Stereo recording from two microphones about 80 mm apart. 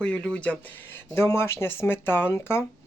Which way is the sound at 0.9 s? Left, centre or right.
Left.